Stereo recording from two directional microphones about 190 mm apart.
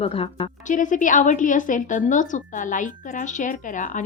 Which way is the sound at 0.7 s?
45° left (ahead or behind).